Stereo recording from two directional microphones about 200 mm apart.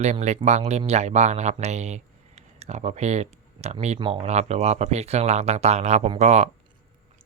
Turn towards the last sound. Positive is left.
turn(degrees=-35)  # may be behind; listen again after turning